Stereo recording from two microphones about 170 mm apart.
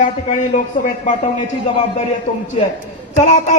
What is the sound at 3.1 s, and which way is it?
Speech, 45° left (ahead or behind).